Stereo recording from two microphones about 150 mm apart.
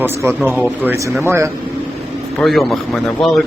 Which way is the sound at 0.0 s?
15° right (ahead or behind).